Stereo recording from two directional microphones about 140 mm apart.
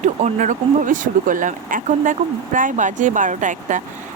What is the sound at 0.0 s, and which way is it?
Speech, 55° right (ahead or behind).